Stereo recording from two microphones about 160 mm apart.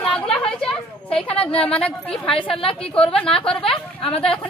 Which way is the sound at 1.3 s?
35° left (ahead or behind).